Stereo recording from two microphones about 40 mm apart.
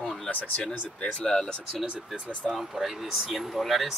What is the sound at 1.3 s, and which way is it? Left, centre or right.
Speech, centre.